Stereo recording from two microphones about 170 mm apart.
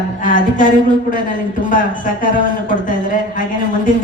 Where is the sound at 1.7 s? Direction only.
50° left (ahead or behind).